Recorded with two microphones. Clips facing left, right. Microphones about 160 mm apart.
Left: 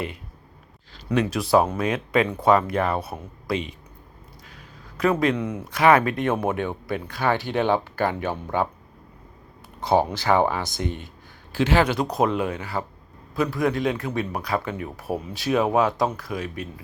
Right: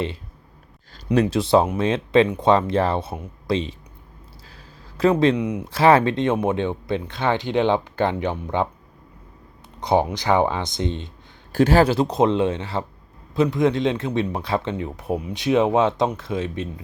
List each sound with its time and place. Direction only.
1.1 s speech: 30° right (ahead or behind)
4.4 s a sound: 30° right (ahead or behind)
5.4 s speech: 15° right (ahead or behind)
5.6 s speech: 30° right (ahead or behind)
9.8 s speech: 20° right (ahead or behind)
11.5 s speech: 40° right (ahead or behind); by 16.8 s 25° right (ahead or behind)